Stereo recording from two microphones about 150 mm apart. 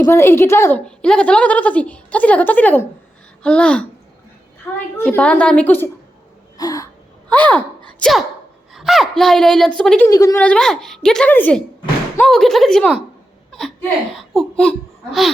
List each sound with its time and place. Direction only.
0.0 s a woman's voice: 15° left (ahead or behind)
0.9 s a woman's voice: 5° left (ahead or behind)
4.9 s a woman's voice: 10° left (ahead or behind)
6.6 s a sound: 25° left (ahead or behind)
7.3 s speech: 10° left (ahead or behind)
10.1 s speech: 25° left (ahead or behind)
10.4 s a woman's voice: 5° left (ahead or behind)